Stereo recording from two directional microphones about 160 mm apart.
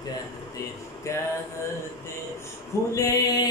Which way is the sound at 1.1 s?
20° left (ahead or behind).